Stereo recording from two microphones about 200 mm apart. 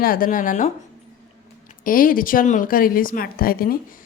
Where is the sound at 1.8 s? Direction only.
45° left (ahead or behind).